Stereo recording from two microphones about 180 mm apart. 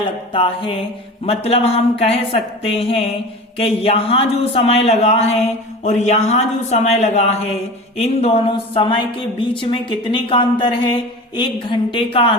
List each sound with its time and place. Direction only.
0.3 s a woman's voice: 30° left (ahead or behind)